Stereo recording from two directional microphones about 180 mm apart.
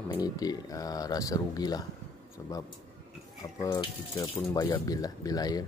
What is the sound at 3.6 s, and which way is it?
Speech, 20° left (ahead or behind).